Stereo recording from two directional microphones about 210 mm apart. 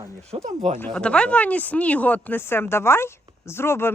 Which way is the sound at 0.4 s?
35° right (ahead or behind).